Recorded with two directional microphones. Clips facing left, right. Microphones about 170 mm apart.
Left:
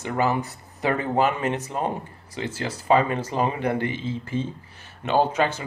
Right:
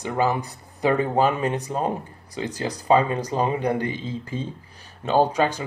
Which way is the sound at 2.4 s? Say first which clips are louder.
Right 2 dB; 15° right (ahead or behind).